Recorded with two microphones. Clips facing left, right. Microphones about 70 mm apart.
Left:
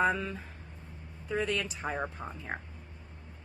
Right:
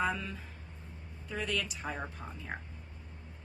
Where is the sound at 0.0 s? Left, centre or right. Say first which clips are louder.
Left 5 dB; left.